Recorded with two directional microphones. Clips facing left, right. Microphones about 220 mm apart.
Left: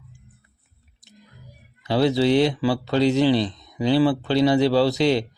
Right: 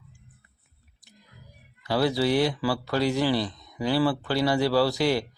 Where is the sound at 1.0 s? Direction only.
20° left (ahead or behind).